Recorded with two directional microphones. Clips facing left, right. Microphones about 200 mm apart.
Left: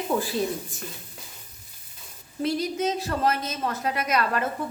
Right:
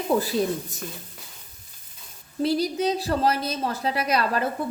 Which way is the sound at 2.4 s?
35° right (ahead or behind).